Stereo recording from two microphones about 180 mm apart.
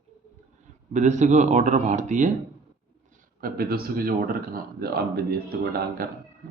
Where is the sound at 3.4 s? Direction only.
55° right (ahead or behind).